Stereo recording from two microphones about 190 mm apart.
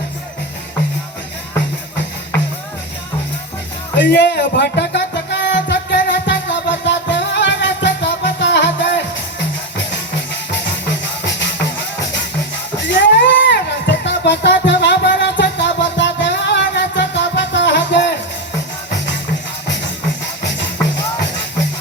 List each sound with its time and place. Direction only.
3.9 s music: 70° left (ahead or behind)
11.3 s music: 70° left (ahead or behind)